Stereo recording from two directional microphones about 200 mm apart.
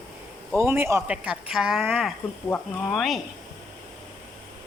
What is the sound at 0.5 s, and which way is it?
Speech, 10° right (ahead or behind).